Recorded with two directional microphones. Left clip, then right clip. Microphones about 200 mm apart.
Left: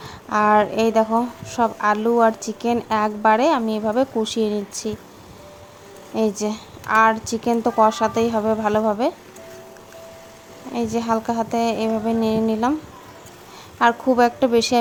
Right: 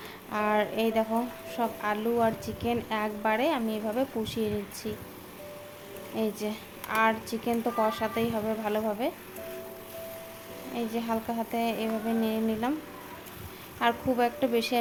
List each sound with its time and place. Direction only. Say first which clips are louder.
0.0 s a woman's voice: left 11 dB; 30° left (ahead or behind)
6.1 s a woman's voice: left 10 dB; 30° left (ahead or behind)
10.8 s a woman's voice: left 10 dB; 30° left (ahead or behind)
13.7 s a woman's voice: left 10 dB; 35° left (ahead or behind)